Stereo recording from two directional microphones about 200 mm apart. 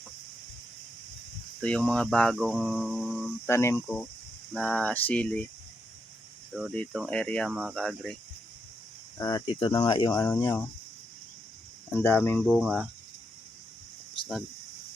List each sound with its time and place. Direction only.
1.6 s speech: 5° left (ahead or behind)
3.4 s speech: 15° left (ahead or behind)
6.5 s cricket: 5° right (ahead or behind)
6.7 s speech: centre (ahead or behind)
9.1 s speech: 20° left (ahead or behind)
10.2 s speech: 10° left (ahead or behind)
11.9 s speech: 10° left (ahead or behind)
12.5 s speech: 5° right (ahead or behind)